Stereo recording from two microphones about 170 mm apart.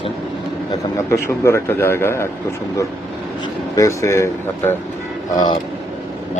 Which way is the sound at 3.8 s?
15° left (ahead or behind).